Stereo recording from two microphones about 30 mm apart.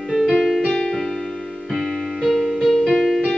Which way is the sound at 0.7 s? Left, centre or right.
Left.